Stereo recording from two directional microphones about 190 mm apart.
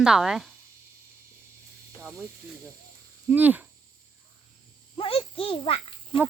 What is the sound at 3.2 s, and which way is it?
Speech, 10° right (ahead or behind).